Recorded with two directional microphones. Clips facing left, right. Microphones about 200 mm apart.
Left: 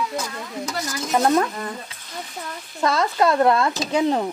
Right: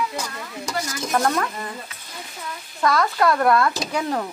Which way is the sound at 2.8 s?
25° left (ahead or behind).